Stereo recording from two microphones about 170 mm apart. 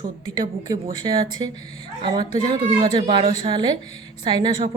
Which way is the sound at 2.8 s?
30° right (ahead or behind).